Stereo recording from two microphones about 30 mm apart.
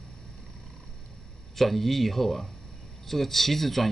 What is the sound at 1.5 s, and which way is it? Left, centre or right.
Speech, centre.